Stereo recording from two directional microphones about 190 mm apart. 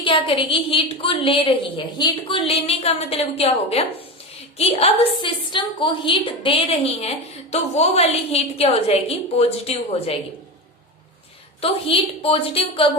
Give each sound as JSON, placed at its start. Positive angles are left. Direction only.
{"t": 0.0, "sound": "a woman's voice", "side_deg": 30}
{"t": 11.6, "sound": "a woman's voice", "side_deg": 30}